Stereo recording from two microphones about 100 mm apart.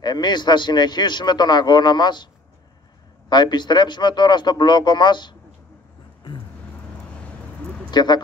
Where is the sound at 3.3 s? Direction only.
45° left (ahead or behind).